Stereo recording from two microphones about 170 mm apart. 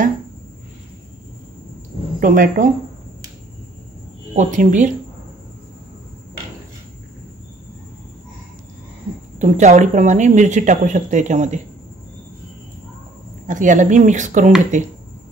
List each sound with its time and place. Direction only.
2.1 s a woman's voice: 55° right (ahead or behind)
4.4 s speech: 50° right (ahead or behind)
9.4 s speech: 45° right (ahead or behind)
13.5 s speech: 50° right (ahead or behind)